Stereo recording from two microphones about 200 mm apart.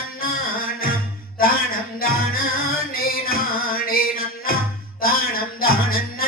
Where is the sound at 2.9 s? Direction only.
50° left (ahead or behind).